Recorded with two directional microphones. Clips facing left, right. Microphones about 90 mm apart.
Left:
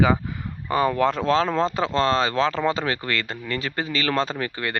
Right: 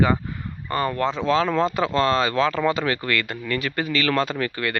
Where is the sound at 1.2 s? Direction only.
35° left (ahead or behind).